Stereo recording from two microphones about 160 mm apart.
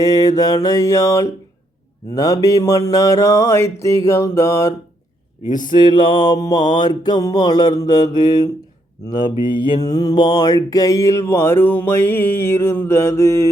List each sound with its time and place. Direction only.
0.0 s mantra: 20° left (ahead or behind)